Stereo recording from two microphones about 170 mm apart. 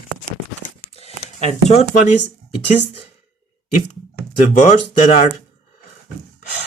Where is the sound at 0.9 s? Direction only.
40° left (ahead or behind).